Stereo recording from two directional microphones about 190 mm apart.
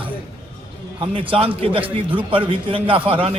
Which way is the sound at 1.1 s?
30° right (ahead or behind).